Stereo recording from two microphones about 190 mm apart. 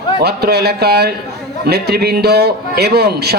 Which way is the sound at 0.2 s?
60° right (ahead or behind).